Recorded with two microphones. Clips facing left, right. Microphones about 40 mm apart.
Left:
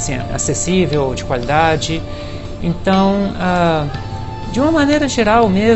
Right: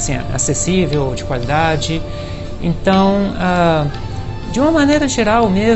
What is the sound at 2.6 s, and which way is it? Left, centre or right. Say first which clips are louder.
Speech: right 1 dB; centre.